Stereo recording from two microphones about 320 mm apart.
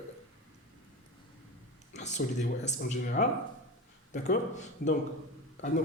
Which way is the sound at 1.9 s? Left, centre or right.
Left.